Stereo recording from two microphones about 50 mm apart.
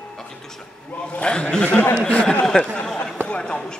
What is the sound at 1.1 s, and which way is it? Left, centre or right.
Speech, centre.